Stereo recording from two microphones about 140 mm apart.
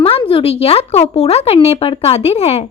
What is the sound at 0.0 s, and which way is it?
Speech, 40° left (ahead or behind).